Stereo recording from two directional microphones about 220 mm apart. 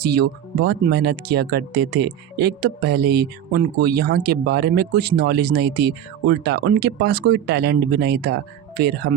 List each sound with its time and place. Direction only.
0.0 s speech: 45° right (ahead or behind)